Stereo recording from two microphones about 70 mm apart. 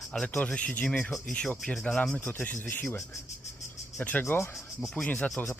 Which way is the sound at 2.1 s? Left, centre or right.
Left.